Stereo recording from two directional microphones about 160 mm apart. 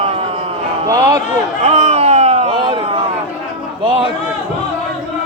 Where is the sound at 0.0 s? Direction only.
35° right (ahead or behind).